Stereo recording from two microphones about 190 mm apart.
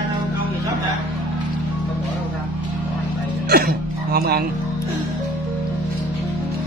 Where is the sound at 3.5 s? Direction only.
50° right (ahead or behind).